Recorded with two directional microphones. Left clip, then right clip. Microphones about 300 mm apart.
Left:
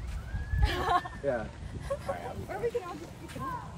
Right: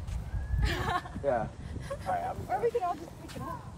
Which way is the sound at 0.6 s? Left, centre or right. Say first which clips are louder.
Left 4 dB; centre.